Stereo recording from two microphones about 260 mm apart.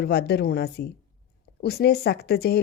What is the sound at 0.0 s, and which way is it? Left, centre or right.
Speech, left.